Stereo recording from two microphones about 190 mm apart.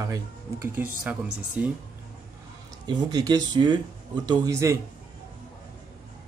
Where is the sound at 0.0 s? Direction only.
15° right (ahead or behind).